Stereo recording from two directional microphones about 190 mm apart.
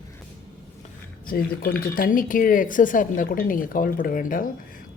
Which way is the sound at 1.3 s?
50° left (ahead or behind).